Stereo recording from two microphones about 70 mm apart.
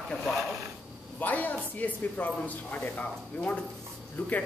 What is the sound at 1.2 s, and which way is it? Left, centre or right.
Speech, left.